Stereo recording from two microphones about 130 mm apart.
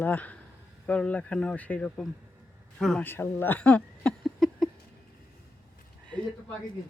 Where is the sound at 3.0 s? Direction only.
15° left (ahead or behind).